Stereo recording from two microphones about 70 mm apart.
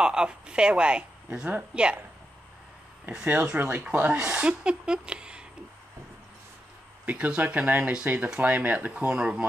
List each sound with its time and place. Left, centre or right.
0.0 s speech: centre
3.3 s speech: right
7.1 s speech: centre